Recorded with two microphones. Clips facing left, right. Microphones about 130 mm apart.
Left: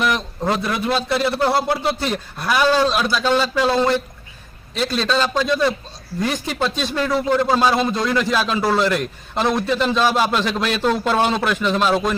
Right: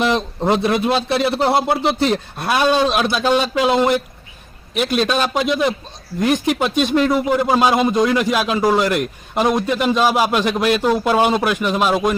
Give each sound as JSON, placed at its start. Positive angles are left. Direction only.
{"t": 0.0, "sound": "a man's voice", "side_deg": -25}